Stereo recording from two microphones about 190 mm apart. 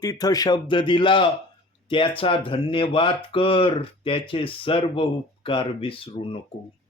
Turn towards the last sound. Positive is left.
turn(degrees=30)  # may be behind; listen again after turning